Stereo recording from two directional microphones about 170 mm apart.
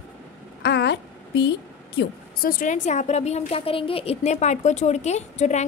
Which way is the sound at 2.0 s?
60° left (ahead or behind).